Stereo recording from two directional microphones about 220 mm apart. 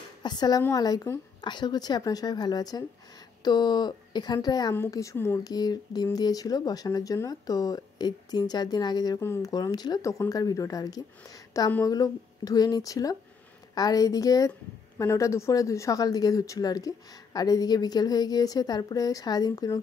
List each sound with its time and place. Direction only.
0.2 s a woman's voice: 20° left (ahead or behind)